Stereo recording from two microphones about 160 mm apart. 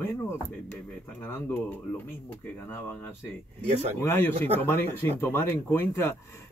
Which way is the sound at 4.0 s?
15° left (ahead or behind).